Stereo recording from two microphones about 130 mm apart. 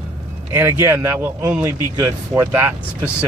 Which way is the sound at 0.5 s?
20° right (ahead or behind).